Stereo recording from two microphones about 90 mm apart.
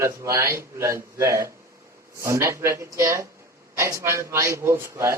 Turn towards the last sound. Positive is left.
turn(degrees=-30)  # may be behind; listen again after turning